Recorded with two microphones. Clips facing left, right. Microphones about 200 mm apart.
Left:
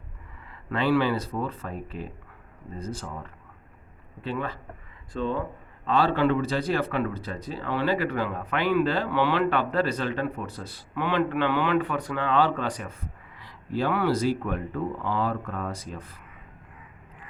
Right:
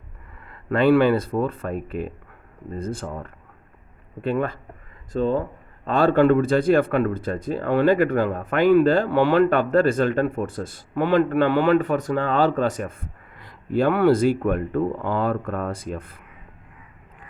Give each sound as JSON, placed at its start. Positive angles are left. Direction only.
{"t": 0.4, "sound": "a man's voice", "side_deg": -55}
{"t": 5.1, "sound": "a man's voice", "side_deg": -40}